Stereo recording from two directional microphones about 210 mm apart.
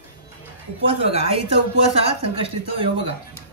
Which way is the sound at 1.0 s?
25° right (ahead or behind).